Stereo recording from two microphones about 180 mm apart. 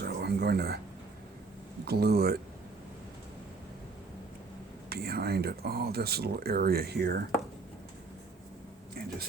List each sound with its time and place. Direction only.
0.0 s a sound: 65° right (ahead or behind)
1.8 s speech: 60° right (ahead or behind)
4.9 s speech: 60° right (ahead or behind)